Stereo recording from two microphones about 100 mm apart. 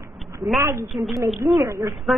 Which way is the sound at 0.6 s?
30° right (ahead or behind).